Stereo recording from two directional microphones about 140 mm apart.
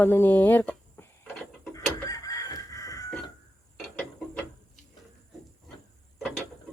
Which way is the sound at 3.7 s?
5° left (ahead or behind).